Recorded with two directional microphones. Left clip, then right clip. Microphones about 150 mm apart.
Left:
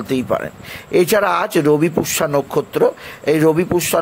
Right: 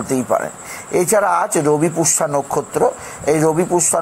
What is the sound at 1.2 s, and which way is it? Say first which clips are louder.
Speech: even; 55° left (ahead or behind).